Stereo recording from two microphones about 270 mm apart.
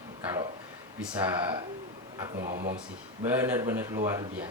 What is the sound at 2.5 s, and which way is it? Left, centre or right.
Speech, right.